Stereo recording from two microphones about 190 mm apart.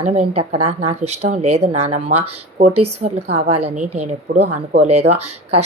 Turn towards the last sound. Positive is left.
turn(degrees=-35)  # may be behind; listen again after turning